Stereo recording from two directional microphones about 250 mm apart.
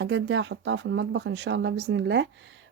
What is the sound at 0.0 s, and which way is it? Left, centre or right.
Speech, right.